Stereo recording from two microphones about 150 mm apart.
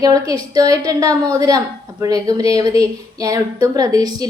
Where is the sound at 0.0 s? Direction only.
25° right (ahead or behind).